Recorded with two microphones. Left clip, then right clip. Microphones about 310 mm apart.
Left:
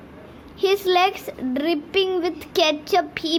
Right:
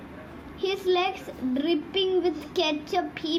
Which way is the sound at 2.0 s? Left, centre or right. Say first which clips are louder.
Left 4 dB; left.